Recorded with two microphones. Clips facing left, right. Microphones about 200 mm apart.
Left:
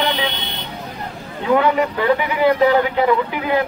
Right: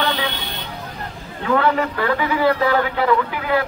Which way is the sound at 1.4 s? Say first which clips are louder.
Left 2 dB; 15° left (ahead or behind).